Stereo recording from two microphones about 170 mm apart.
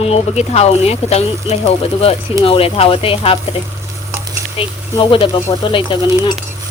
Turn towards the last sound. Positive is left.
turn(degrees=30)  # may be behind; listen again after turning